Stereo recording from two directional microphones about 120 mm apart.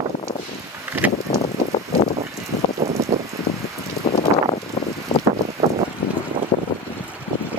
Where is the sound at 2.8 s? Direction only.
30° right (ahead or behind).